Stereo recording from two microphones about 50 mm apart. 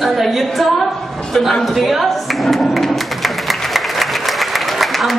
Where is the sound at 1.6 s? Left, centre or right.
Centre.